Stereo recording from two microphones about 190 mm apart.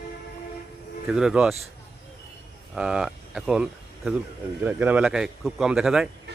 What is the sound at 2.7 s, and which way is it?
Speech, 5° right (ahead or behind).